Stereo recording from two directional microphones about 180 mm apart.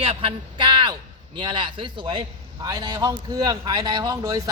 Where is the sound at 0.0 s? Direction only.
30° right (ahead or behind).